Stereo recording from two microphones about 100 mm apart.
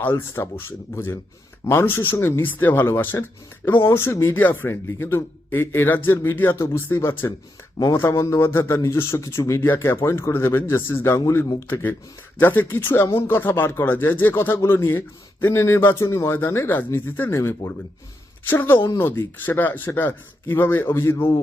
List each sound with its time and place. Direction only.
0.0 s speech: 25° left (ahead or behind)